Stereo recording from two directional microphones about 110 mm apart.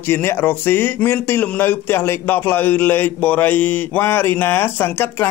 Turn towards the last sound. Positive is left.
turn(degrees=20)  # may be behind; listen again after turning